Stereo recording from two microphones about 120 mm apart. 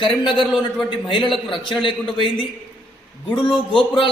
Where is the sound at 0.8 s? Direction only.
45° left (ahead or behind).